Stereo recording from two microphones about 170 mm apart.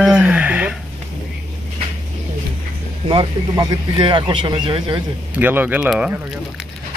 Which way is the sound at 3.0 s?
25° right (ahead or behind).